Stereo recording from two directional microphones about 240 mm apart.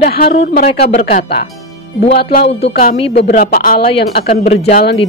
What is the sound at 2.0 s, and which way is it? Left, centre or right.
A woman's voice, left.